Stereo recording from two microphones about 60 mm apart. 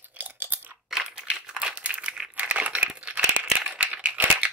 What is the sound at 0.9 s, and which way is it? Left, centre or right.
Crumpling, centre.